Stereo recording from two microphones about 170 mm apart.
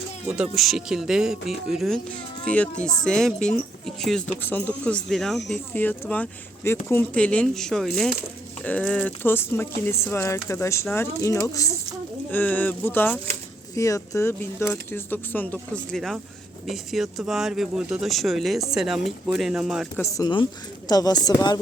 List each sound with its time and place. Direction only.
0.3 s a woman's voice: 5° right (ahead or behind)
20.0 s a woman's voice: 20° left (ahead or behind)